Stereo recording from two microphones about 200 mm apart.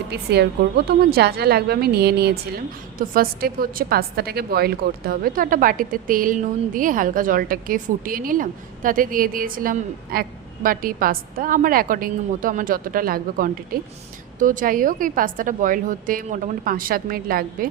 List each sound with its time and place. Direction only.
0.1 s a woman's voice: 55° right (ahead or behind)